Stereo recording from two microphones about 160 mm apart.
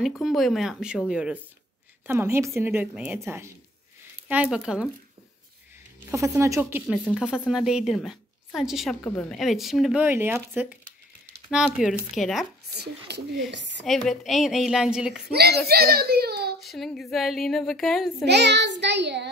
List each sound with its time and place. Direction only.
0.0 s speech: centre (ahead or behind)
2.0 s speech: 15° right (ahead or behind)
6.0 s speech: 20° right (ahead or behind)
11.5 s speech: centre (ahead or behind)
12.7 s child singing: 90° right
13.5 s speech: 90° right
13.8 s speech: centre (ahead or behind)
15.3 s a child's voice: 80° right
16.6 s speech: centre (ahead or behind)
18.2 s child singing: 90° right